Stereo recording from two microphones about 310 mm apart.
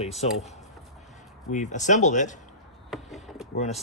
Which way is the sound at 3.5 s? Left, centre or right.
Left.